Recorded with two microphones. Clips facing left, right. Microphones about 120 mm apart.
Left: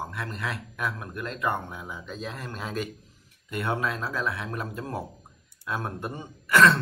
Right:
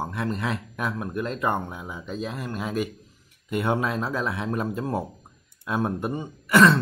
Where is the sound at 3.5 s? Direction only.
20° right (ahead or behind).